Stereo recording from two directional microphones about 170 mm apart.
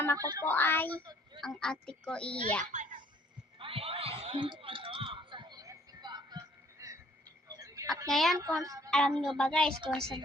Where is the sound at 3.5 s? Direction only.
35° right (ahead or behind).